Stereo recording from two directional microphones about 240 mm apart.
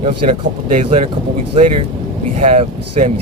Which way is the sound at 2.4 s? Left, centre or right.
Right.